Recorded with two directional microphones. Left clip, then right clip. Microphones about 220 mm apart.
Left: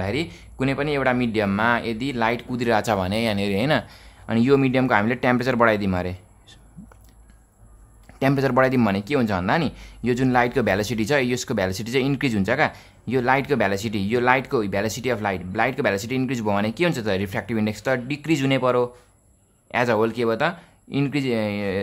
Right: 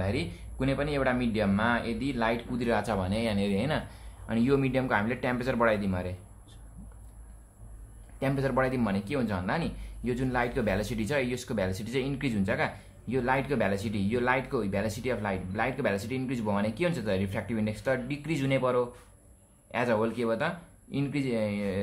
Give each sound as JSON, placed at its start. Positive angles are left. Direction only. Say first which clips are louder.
{"t": 0.0, "sound": "speech", "louder": "left 6 dB", "side_deg": 40}
{"t": 8.2, "sound": "speech", "louder": "left 9 dB", "side_deg": 40}